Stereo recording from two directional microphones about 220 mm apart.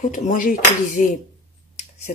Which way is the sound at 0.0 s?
35° left (ahead or behind).